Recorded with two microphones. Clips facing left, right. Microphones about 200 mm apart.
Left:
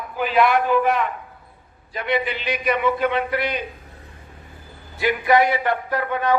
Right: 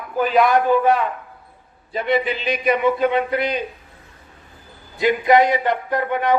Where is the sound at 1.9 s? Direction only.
25° right (ahead or behind).